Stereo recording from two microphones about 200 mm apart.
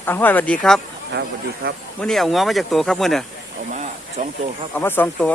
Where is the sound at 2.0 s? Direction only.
Centre (ahead or behind).